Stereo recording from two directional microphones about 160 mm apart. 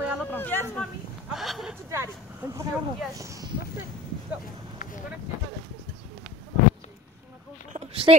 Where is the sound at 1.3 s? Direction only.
Centre (ahead or behind).